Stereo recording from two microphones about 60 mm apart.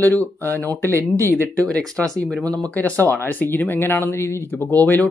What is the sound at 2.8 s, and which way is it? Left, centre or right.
Speech, left.